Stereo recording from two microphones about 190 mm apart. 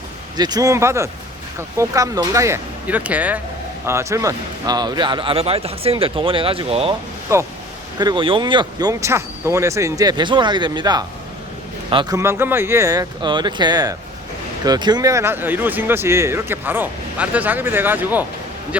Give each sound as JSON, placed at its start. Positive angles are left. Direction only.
{"t": 0.3, "sound": "speech", "side_deg": -20}
{"t": 7.3, "sound": "speech", "side_deg": -15}